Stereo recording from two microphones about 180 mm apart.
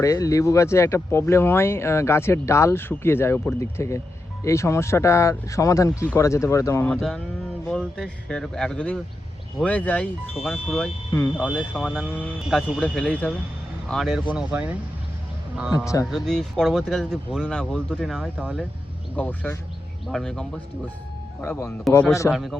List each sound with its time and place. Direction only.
0.0 s speech: 20° left (ahead or behind)
6.9 s speech: 5° left (ahead or behind)
15.7 s speech: 20° left (ahead or behind)
16.0 s speech: centre (ahead or behind)